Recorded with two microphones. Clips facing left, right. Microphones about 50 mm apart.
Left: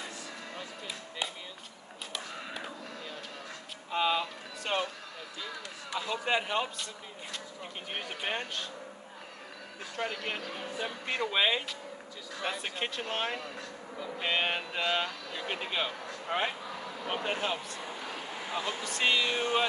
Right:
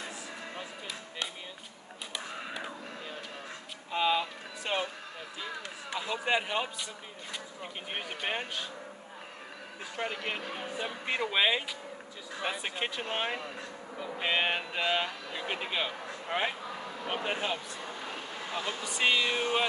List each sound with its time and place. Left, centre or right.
3.9 s a sound: centre
5.9 s a man's voice: centre
7.9 s speech: centre
9.9 s speech: centre
16.3 s a sound: centre
18.6 s speech: centre